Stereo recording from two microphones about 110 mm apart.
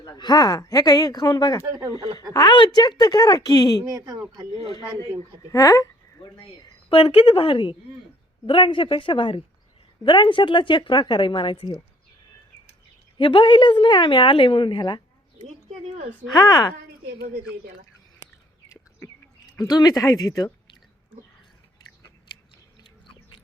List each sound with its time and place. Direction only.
0.0 s speech: 40° left (ahead or behind)
3.8 s speech: 35° right (ahead or behind)
5.5 s speech: 30° left (ahead or behind)
6.2 s a woman's voice: 60° left (ahead or behind)
13.1 s a woman's voice: 45° left (ahead or behind)
16.3 s speech: 35° left (ahead or behind)
19.5 s speech: 40° left (ahead or behind)